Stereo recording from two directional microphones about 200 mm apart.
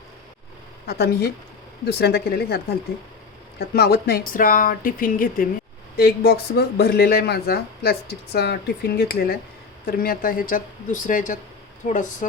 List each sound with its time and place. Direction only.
0.9 s speech: 55° left (ahead or behind)